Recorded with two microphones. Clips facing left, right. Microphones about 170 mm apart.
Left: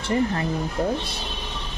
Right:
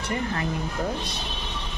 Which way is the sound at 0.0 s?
30° left (ahead or behind).